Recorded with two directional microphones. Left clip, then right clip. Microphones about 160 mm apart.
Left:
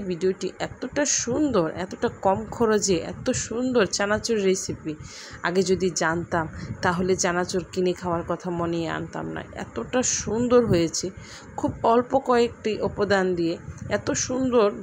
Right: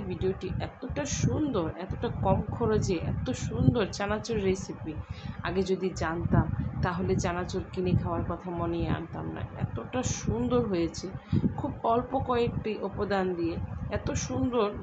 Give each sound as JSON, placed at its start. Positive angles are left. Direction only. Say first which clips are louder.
{"t": 0.1, "sound": "a woman's voice", "louder": "left 7 dB", "side_deg": 55}